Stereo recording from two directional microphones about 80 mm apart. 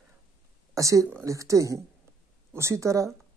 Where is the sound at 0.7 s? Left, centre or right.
Right.